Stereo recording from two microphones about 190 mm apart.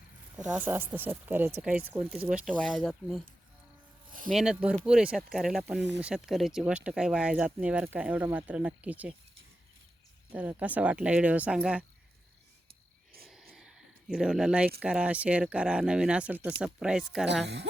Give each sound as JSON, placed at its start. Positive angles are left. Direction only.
{"t": 0.3, "sound": "speech", "side_deg": -5}
{"t": 4.3, "sound": "speech", "side_deg": 0}
{"t": 10.3, "sound": "speech", "side_deg": -10}
{"t": 13.2, "sound": "a sound", "side_deg": 0}
{"t": 14.8, "sound": "speech", "side_deg": -5}
{"t": 17.4, "sound": "a woman's voice", "side_deg": -65}